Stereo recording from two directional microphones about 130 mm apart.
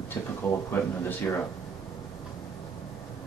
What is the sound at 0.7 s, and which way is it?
Speech, 15° left (ahead or behind).